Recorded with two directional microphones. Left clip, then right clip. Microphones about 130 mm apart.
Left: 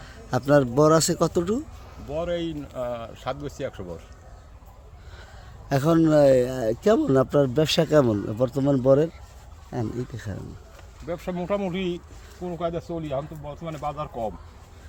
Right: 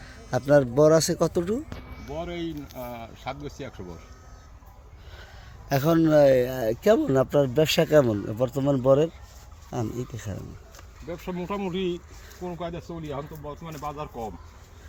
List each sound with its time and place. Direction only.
0.0 s speech: 5° left (ahead or behind)
2.0 s speech: 35° left (ahead or behind)
5.6 s speech: 10° left (ahead or behind)
11.1 s speech: 20° left (ahead or behind)